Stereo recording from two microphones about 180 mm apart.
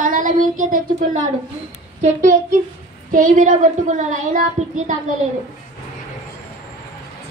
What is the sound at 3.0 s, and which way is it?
Child singing, 45° right (ahead or behind).